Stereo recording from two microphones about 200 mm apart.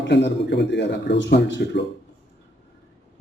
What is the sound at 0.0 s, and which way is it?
A man's voice, 60° left (ahead or behind).